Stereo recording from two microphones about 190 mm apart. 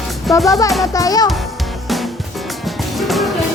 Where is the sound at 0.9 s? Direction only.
20° left (ahead or behind).